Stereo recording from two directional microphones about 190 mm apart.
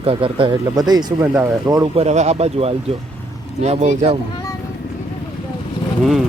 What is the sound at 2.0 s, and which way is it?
Speech, 35° right (ahead or behind).